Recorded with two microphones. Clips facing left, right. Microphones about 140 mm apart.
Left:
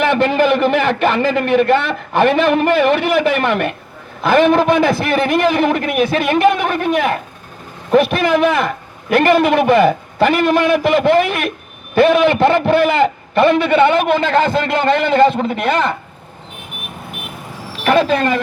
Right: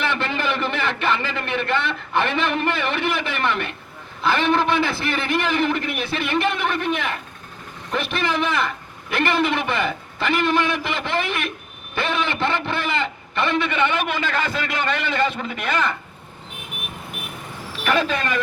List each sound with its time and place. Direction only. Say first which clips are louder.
0.0 s a man's voice: left 10 dB; 40° left (ahead or behind)
17.8 s a man's voice: left 8 dB; 35° left (ahead or behind)